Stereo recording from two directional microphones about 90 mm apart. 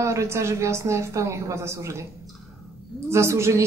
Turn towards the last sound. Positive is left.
turn(degrees=-30)  # may be behind; listen again after turning